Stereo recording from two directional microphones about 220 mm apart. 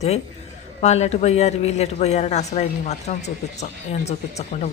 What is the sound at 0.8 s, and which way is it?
A man's voice, 30° left (ahead or behind).